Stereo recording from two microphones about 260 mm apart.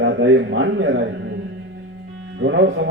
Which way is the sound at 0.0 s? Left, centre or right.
Right.